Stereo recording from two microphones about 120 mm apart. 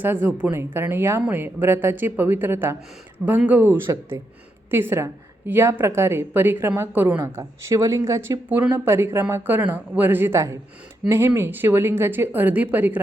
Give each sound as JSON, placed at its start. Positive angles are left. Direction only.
{"t": 0.0, "sound": "a woman's voice", "side_deg": -15}
{"t": 8.4, "sound": "speech", "side_deg": -15}